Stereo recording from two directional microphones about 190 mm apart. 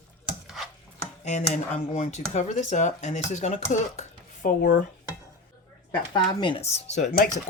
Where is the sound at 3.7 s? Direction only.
40° left (ahead or behind).